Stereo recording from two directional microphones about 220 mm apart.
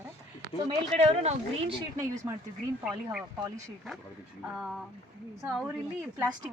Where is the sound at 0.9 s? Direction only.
30° right (ahead or behind).